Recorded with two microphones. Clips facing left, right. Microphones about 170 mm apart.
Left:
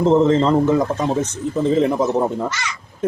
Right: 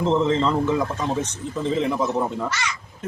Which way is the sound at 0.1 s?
45° left (ahead or behind).